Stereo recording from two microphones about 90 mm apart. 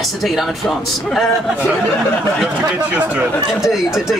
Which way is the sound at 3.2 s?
5° right (ahead or behind).